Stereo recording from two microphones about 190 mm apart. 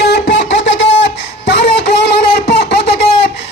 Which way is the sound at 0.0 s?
65° left (ahead or behind).